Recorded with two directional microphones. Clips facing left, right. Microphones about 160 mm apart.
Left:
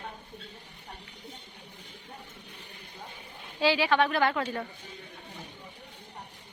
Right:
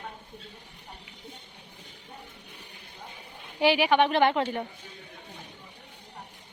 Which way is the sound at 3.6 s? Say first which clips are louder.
Right 3 dB; 15° right (ahead or behind).